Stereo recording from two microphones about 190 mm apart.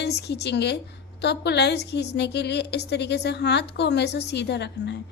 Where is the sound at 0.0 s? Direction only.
60° left (ahead or behind).